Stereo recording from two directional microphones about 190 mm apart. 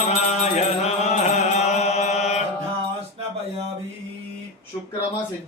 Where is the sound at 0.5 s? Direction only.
35° left (ahead or behind).